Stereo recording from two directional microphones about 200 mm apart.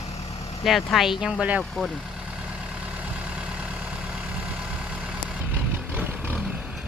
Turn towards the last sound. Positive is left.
turn(degrees=0)  # may be behind; listen again after turning